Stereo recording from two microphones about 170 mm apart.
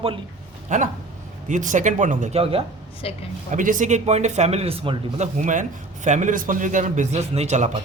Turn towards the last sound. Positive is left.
turn(degrees=-40)  # may be behind; listen again after turning